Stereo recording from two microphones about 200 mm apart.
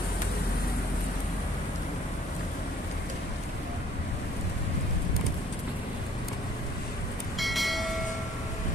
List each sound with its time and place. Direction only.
7.3 s train: centre (ahead or behind)